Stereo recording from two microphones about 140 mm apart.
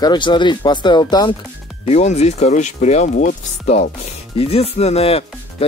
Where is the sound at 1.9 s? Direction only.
50° left (ahead or behind).